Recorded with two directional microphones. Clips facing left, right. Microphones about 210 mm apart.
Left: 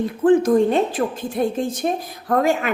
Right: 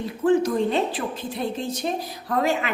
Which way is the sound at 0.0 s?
50° left (ahead or behind).